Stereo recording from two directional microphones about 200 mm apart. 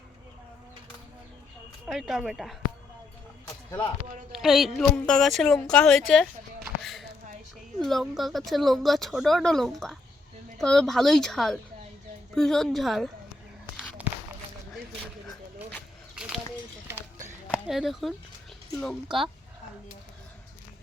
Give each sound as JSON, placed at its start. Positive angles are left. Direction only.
{"t": 1.9, "sound": "speech", "side_deg": 0}
{"t": 3.4, "sound": "music", "side_deg": 20}
{"t": 4.3, "sound": "speech", "side_deg": 0}
{"t": 7.9, "sound": "speech", "side_deg": 0}
{"t": 14.0, "sound": "run", "side_deg": -5}
{"t": 16.1, "sound": "bird flight", "side_deg": -5}
{"t": 17.5, "sound": "speech", "side_deg": 0}
{"t": 19.0, "sound": "speech", "side_deg": -25}